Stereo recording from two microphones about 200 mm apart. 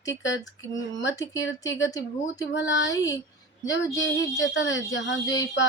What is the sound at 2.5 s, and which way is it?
Speech, 65° left (ahead or behind).